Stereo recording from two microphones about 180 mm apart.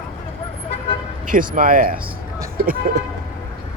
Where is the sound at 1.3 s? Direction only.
50° right (ahead or behind).